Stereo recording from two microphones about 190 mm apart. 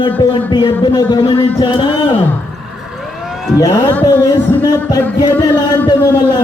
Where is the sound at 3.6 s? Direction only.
15° left (ahead or behind).